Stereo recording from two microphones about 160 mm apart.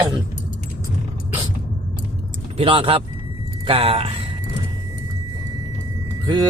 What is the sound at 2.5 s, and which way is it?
Speech, 35° right (ahead or behind).